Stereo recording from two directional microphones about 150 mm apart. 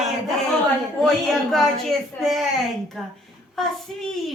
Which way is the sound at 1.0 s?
Centre (ahead or behind).